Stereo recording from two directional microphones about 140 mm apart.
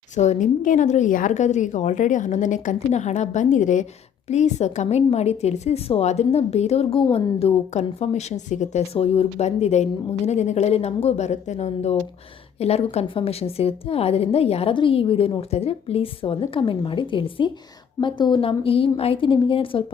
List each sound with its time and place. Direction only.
0.2 s a woman's voice: 60° left (ahead or behind); by 19.8 s 40° left (ahead or behind)